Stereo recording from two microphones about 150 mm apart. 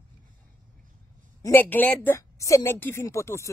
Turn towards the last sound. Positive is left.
turn(degrees=20)  # may be behind; listen again after turning